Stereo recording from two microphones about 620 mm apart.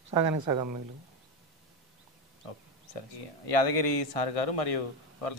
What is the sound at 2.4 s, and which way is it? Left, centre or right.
Speech, left.